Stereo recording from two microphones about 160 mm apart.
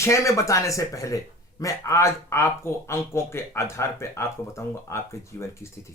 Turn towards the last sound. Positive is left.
turn(degrees=20)  # may be behind; listen again after turning